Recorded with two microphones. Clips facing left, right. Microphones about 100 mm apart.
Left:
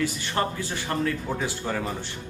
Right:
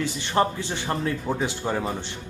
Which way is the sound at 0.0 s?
25° right (ahead or behind).